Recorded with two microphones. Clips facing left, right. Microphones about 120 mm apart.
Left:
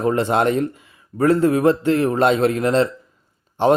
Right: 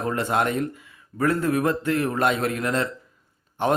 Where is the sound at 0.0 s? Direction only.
25° left (ahead or behind).